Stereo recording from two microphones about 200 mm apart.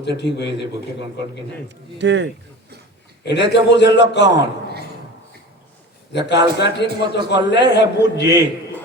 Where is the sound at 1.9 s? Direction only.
60° right (ahead or behind).